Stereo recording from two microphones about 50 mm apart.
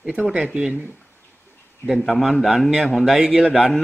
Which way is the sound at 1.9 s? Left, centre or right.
Centre.